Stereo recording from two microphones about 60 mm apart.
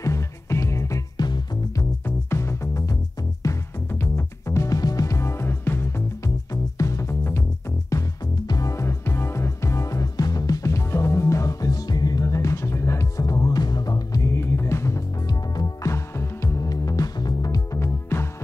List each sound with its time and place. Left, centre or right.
0.0 s music: left
2.0 s music: left
3.9 s music: left
4.6 s music: left
6.2 s music: left
8.5 s music: left
13.2 s music: left
14.3 s music: left
15.2 s music: left
16.2 s music: left
16.6 s music: left
17.7 s music: left